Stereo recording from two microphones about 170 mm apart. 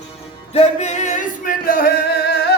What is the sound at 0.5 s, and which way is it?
Male singing, 40° left (ahead or behind).